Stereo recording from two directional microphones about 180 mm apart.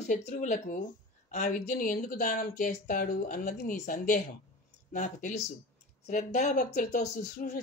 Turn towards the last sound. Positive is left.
turn(degrees=40)  # may be behind; listen again after turning